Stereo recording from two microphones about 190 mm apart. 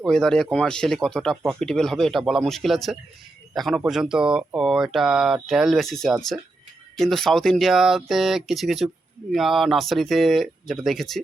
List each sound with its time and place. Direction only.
0.0 s speech: 5° left (ahead or behind)